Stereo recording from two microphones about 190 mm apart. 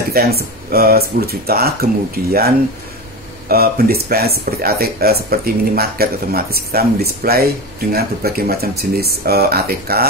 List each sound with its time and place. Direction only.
0.1 s speech: 55° right (ahead or behind)
3.4 s speech: 50° right (ahead or behind)